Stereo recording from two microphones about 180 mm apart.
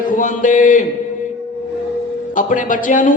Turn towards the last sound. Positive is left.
turn(degrees=45)  # may be behind; listen again after turning